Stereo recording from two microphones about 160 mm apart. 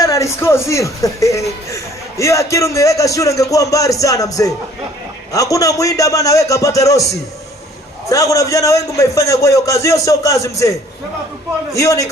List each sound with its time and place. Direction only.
0.0 s speech: 20° left (ahead or behind)